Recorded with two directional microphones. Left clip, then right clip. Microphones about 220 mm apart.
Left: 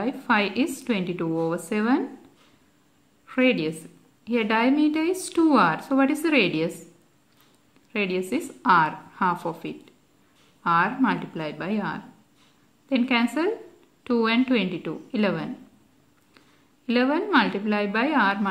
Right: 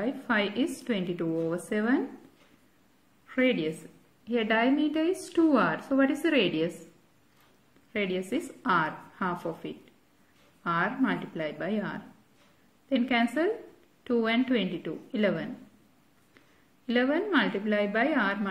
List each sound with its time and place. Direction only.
0.0 s speech: 20° left (ahead or behind)
3.3 s a woman's voice: 20° left (ahead or behind)
7.9 s speech: 20° left (ahead or behind)
16.8 s speech: 20° left (ahead or behind)